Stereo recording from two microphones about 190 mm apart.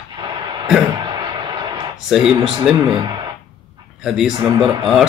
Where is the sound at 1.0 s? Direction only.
25° right (ahead or behind).